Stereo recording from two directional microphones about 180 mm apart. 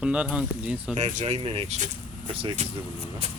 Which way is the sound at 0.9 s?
45° right (ahead or behind).